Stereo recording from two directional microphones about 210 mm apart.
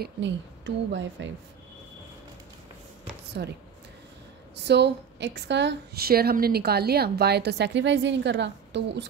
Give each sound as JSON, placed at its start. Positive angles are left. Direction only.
{"t": 0.0, "sound": "speech", "side_deg": -60}
{"t": 3.4, "sound": "a woman's voice", "side_deg": -50}
{"t": 4.6, "sound": "a woman's voice", "side_deg": -55}